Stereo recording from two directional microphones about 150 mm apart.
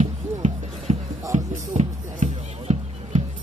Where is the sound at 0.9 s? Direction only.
45° right (ahead or behind).